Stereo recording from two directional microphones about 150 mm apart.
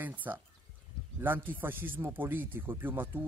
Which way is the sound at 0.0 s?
10° right (ahead or behind).